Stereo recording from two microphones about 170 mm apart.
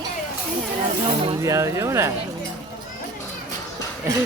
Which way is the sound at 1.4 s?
15° right (ahead or behind).